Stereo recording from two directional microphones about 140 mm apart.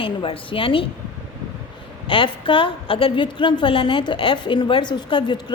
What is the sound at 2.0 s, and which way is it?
A woman's voice, 40° left (ahead or behind).